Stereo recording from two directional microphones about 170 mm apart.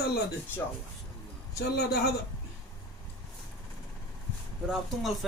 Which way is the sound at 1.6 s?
70° left (ahead or behind).